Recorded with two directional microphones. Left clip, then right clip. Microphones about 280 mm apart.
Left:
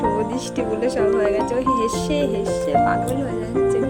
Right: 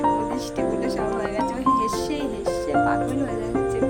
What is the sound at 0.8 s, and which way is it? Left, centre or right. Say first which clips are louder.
Music: left 6 dB; centre.